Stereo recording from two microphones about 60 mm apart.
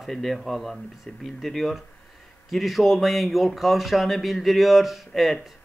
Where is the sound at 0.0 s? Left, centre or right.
Centre.